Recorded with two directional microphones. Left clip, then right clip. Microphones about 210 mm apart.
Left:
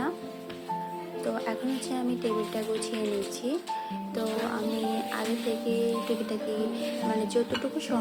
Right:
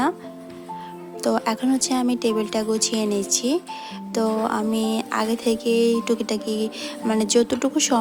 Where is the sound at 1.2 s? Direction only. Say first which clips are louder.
Right 10 dB; 50° right (ahead or behind).